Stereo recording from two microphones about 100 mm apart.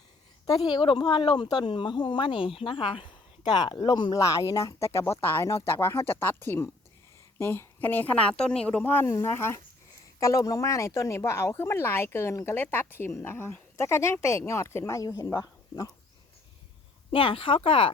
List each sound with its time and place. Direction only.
0.4 s speech: 40° left (ahead or behind)
4.2 s speech: 30° left (ahead or behind)
17.1 s speech: 65° left (ahead or behind)